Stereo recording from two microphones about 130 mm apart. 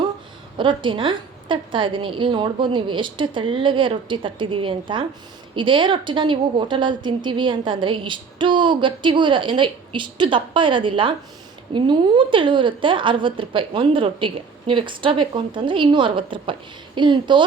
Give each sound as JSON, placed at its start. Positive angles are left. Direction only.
{"t": 0.5, "sound": "a woman's voice", "side_deg": -40}